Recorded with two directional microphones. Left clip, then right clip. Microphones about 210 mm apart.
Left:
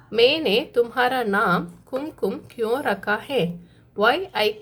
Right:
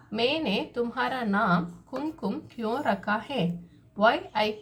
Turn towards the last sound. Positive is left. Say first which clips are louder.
# left 4 dB
turn(degrees=45)  # may be behind; listen again after turning